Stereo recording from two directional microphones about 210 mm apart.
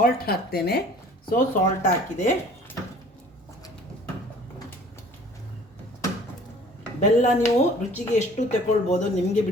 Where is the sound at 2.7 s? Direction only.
10° left (ahead or behind).